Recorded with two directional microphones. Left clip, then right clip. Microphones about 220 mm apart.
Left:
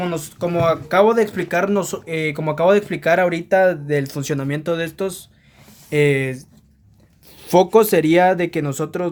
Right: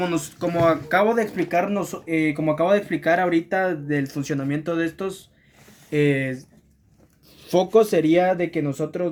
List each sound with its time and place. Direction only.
0.0 s speech: 40° left (ahead or behind)
5.9 s speech: 35° left (ahead or behind)